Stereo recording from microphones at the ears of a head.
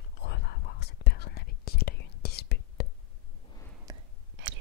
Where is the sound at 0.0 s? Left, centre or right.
Left.